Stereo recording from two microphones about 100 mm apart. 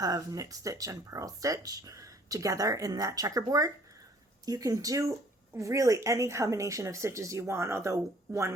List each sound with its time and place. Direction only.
0.0 s speech: 40° right (ahead or behind)